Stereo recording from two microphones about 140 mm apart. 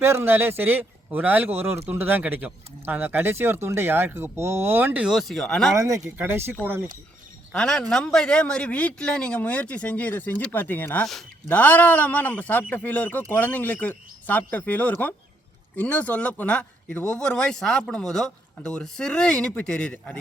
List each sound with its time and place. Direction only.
0.0 s speech: 15° right (ahead or behind); by 5.7 s 5° left (ahead or behind)
5.7 s speech: 25° right (ahead or behind)
7.5 s speech: 5° left (ahead or behind)
11.0 s speech: 5° left (ahead or behind)
11.4 s speech: 15° left (ahead or behind)